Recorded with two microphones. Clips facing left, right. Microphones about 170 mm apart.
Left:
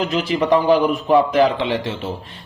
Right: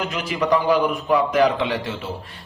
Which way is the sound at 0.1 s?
30° left (ahead or behind).